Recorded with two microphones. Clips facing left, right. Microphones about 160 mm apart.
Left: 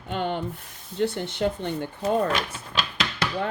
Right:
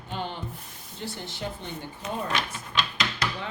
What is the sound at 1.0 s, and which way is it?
Speech, 60° left (ahead or behind).